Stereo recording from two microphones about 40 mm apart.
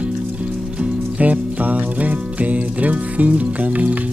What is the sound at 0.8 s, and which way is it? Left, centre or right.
Music, right.